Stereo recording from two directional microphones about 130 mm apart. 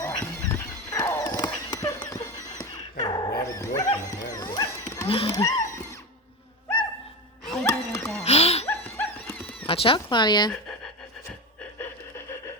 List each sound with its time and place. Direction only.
0.0 s horse: 25° left (ahead or behind)
2.6 s dog: 25° left (ahead or behind)
4.8 s horse: 25° left (ahead or behind)
5.0 s speech: 45° left (ahead or behind)
5.3 s wild animals: 25° left (ahead or behind)
7.6 s a sound: 20° left (ahead or behind)
8.2 s a sound: 55° left (ahead or behind)
8.6 s dog: 15° left (ahead or behind)
9.6 s speech: 45° left (ahead or behind)